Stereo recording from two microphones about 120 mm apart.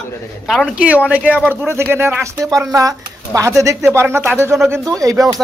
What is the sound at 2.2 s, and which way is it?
Speech, 25° right (ahead or behind).